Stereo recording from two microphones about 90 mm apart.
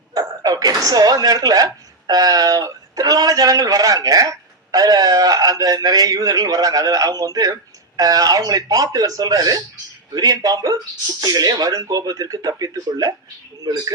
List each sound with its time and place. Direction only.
0.1 s speech: 40° right (ahead or behind)